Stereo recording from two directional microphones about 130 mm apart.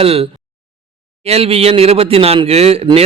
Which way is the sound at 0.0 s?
45° right (ahead or behind).